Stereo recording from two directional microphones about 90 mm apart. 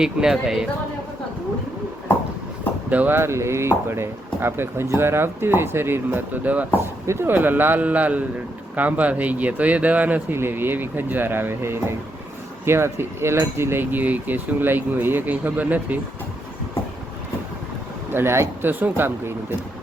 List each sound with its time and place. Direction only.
0.0 s speech: 5° right (ahead or behind)
2.9 s speech: 20° right (ahead or behind)
18.1 s speech: 25° right (ahead or behind)